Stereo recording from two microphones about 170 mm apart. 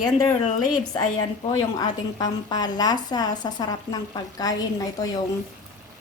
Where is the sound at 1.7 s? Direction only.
25° left (ahead or behind).